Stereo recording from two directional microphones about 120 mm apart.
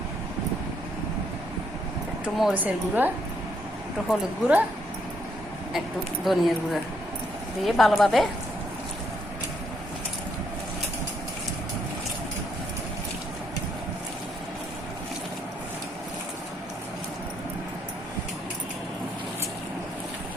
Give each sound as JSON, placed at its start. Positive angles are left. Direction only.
{"t": 2.4, "sound": "a woman's voice", "side_deg": -10}
{"t": 4.1, "sound": "a woman's voice", "side_deg": -10}
{"t": 6.2, "sound": "speech", "side_deg": 0}
{"t": 7.6, "sound": "speech", "side_deg": 0}